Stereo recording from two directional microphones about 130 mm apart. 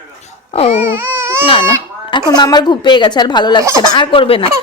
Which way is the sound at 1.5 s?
40° left (ahead or behind).